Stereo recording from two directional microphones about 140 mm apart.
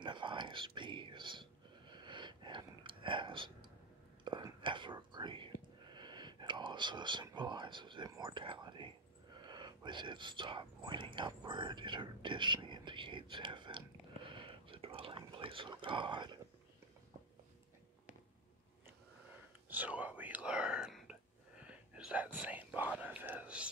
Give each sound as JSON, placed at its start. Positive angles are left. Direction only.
{"t": 0.0, "sound": "whispering", "side_deg": -35}
{"t": 19.7, "sound": "whispering", "side_deg": -10}